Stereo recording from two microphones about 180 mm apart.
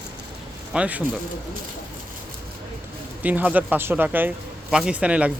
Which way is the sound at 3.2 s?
10° right (ahead or behind).